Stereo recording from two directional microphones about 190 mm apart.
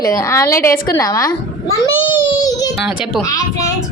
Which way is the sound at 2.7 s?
Centre (ahead or behind).